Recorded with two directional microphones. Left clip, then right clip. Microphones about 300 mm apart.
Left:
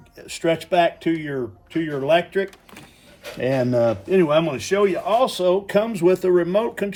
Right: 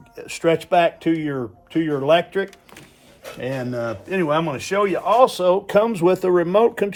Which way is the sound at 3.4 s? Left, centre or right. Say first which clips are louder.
Left 7 dB; centre.